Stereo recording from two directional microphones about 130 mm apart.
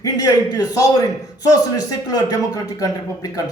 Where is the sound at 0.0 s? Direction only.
30° left (ahead or behind).